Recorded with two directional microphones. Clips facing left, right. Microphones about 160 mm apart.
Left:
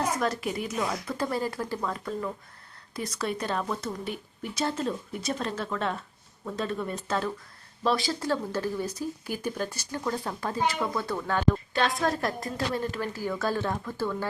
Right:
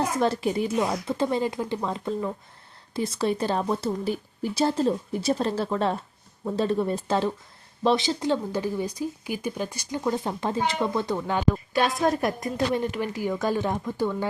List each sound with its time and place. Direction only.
0.2 s a woman's voice: 30° right (ahead or behind)